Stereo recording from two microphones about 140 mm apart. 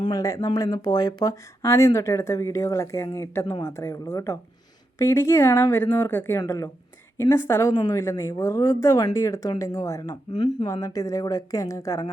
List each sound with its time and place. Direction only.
0.0 s speech: 25° left (ahead or behind)